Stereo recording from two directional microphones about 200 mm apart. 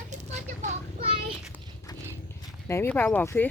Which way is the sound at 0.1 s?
35° right (ahead or behind).